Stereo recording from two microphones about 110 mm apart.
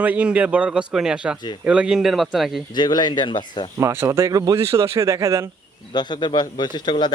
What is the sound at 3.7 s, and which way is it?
Speech, 25° right (ahead or behind).